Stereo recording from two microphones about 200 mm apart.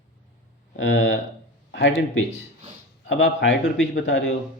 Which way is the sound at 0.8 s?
70° left (ahead or behind).